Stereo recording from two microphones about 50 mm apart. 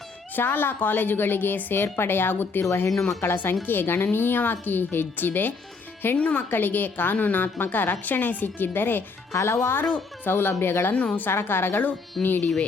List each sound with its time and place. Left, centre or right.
0.3 s a woman's voice: left
6.5 s a woman's voice: left
9.3 s a woman's voice: left
10.9 s a woman's voice: left
11.3 s a woman's voice: left